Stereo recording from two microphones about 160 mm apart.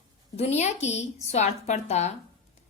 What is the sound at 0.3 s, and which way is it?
A woman's voice, 40° left (ahead or behind).